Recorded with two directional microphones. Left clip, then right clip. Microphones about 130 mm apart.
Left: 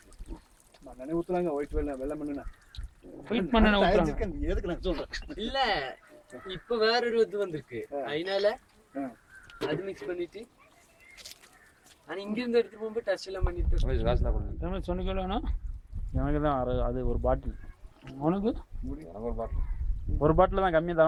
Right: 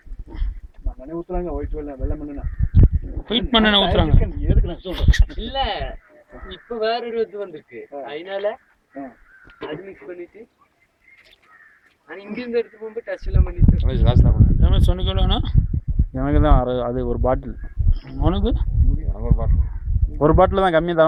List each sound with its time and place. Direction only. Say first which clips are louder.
1.0 s speech: right 2 dB; 40° left (ahead or behind)
3.2 s speech: right 8 dB; 5° right (ahead or behind)
4.2 s speech: right 4 dB; 35° left (ahead or behind)
4.9 s speech: right 7 dB; 10° right (ahead or behind)
5.4 s speech: right 2 dB; 45° left (ahead or behind)
9.6 s speech: right 1 dB; 45° left (ahead or behind)
12.0 s speech: right 3 dB; 45° left (ahead or behind)
13.8 s speech: right 2 dB; 5° left (ahead or behind)
16.1 s speech: right 9 dB; 25° right (ahead or behind)
18.2 s speech: right 6 dB; centre (ahead or behind)
20.1 s speech: right 9 dB; 25° right (ahead or behind)